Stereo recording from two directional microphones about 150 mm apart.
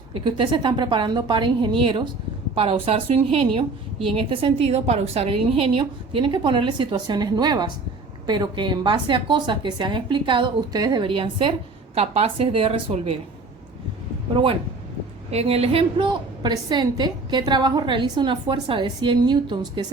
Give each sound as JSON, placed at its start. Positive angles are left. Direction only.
{"t": 0.1, "sound": "a woman's voice", "side_deg": -35}
{"t": 15.3, "sound": "a woman's voice", "side_deg": -45}